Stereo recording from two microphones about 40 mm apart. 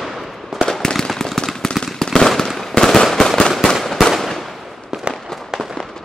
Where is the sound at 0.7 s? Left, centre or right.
Centre.